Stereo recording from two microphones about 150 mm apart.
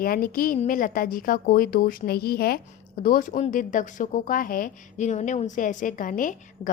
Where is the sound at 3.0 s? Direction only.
65° left (ahead or behind).